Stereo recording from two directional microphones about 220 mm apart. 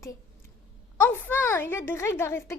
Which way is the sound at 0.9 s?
10° left (ahead or behind).